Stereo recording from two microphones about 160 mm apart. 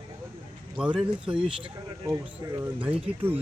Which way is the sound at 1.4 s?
30° right (ahead or behind).